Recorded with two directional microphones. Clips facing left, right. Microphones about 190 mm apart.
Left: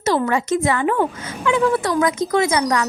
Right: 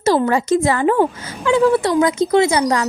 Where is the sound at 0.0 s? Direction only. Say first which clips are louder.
Right 3 dB; 35° right (ahead or behind).